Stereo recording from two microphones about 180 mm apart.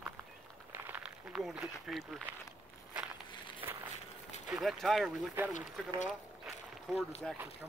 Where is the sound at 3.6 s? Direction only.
10° right (ahead or behind).